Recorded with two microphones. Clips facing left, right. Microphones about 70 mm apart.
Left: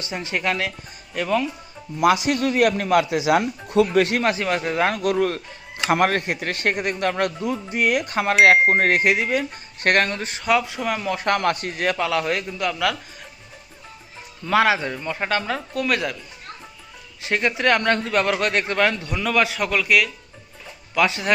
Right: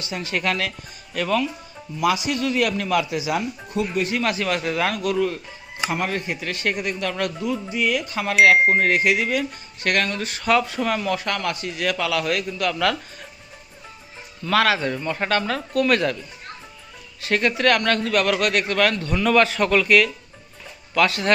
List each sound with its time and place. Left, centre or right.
0.0 s a man's voice: left
2.0 s a man's voice: left
4.2 s a man's voice: left
10.4 s speech: centre
11.2 s a man's voice: left
11.8 s a man's voice: left
14.4 s speech: centre
14.9 s speech: centre
17.2 s a man's voice: centre